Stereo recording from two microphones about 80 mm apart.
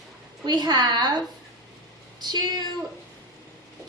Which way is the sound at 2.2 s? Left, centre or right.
Right.